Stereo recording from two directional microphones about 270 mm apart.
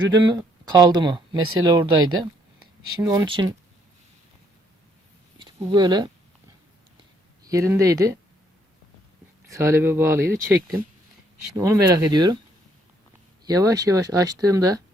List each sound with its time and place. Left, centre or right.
0.1 s speech: centre
5.4 s speech: centre
7.4 s speech: centre
9.6 s speech: centre
13.4 s speech: centre